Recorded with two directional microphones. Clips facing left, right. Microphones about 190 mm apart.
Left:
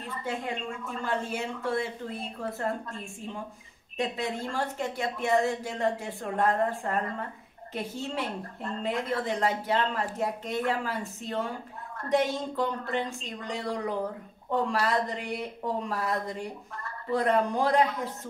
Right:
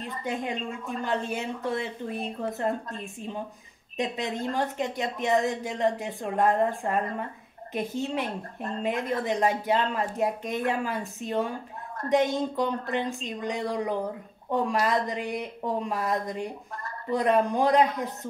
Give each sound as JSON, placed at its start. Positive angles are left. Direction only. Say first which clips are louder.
{"t": 0.2, "sound": "speech", "louder": "right 2 dB", "side_deg": -15}